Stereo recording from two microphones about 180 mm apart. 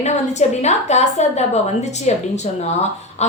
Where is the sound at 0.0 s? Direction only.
40° left (ahead or behind).